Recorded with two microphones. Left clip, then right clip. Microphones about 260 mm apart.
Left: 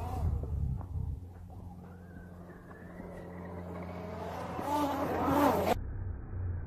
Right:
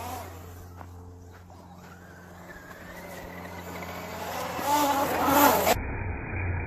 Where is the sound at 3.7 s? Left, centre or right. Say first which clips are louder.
Right 6 dB; centre.